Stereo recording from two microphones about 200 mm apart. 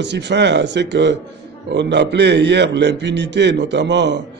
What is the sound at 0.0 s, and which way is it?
A man's voice, 60° right (ahead or behind).